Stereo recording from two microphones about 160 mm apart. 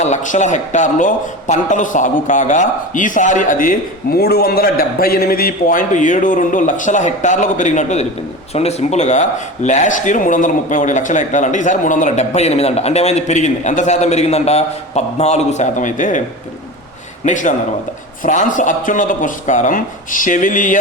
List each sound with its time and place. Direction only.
0.0 s speech: 45° left (ahead or behind)
4.2 s a man's voice: 75° left (ahead or behind); by 16.2 s 50° left (ahead or behind)
17.2 s speech: 50° left (ahead or behind)